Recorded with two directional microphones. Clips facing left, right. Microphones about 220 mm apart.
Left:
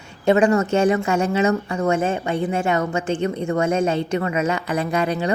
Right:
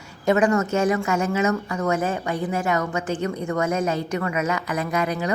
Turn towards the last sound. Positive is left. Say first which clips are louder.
# left 3 dB
turn(degrees=30)  # may be behind; listen again after turning